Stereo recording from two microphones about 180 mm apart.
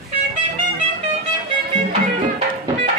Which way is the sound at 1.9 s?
35° right (ahead or behind).